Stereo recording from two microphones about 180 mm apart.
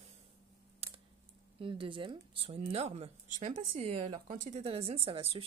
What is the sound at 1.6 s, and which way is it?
Speech, 30° right (ahead or behind).